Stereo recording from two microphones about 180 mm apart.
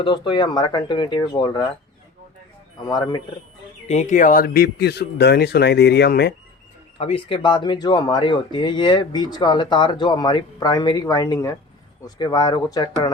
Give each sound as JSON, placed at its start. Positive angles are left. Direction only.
{"t": 0.0, "sound": "speech", "side_deg": 25}
{"t": 2.8, "sound": "speech", "side_deg": 25}
{"t": 3.8, "sound": "speech", "side_deg": 40}
{"t": 7.0, "sound": "speech", "side_deg": 30}